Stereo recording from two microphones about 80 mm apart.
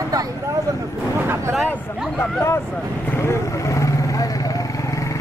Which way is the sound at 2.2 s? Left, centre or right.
Left.